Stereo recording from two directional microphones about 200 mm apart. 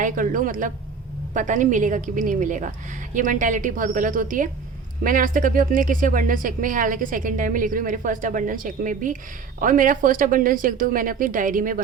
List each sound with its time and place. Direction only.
0.0 s speech: 40° right (ahead or behind)